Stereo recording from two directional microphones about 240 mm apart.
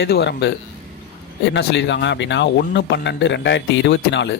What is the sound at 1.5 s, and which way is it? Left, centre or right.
Speech, left.